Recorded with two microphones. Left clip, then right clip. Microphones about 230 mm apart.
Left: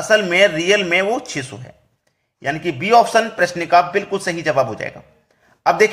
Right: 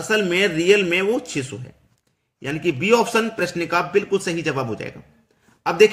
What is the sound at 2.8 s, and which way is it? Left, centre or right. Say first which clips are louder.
A man's voice: left 6 dB; centre.